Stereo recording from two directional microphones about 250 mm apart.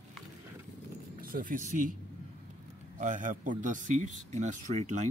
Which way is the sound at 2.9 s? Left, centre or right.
Right.